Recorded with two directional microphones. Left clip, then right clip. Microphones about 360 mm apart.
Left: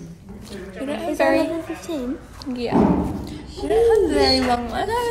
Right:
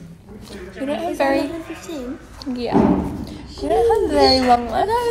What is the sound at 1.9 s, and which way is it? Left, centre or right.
Speech, left.